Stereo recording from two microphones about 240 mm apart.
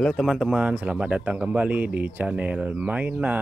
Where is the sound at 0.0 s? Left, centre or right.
Centre.